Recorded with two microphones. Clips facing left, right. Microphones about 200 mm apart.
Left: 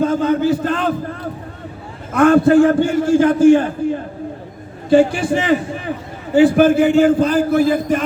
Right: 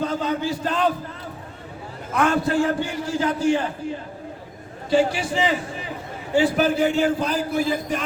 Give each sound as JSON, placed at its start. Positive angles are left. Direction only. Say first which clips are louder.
{"t": 0.0, "sound": "a man's voice", "louder": "left 9 dB", "side_deg": 50}
{"t": 2.1, "sound": "a man's voice", "louder": "left 10 dB", "side_deg": 50}